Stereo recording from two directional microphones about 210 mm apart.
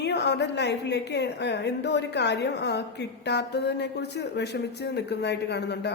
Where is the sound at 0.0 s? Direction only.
55° left (ahead or behind).